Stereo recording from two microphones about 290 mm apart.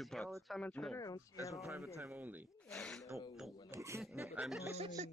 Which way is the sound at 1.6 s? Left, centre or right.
Centre.